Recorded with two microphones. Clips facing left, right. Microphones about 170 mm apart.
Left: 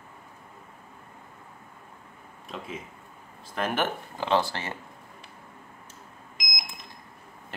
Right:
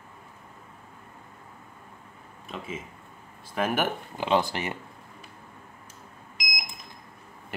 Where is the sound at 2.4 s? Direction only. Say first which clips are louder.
Right 1 dB; centre (ahead or behind).